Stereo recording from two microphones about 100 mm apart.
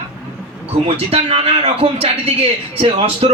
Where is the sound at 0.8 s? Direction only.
80° right.